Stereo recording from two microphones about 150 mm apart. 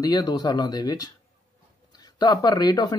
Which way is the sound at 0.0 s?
25° left (ahead or behind).